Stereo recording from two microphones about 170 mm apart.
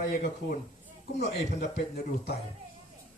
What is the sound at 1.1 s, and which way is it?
A man's voice, 75° left (ahead or behind).